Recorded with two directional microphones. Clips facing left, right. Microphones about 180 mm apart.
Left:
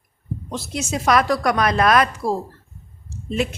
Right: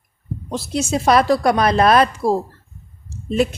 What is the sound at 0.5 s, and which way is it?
A woman's voice, 30° right (ahead or behind).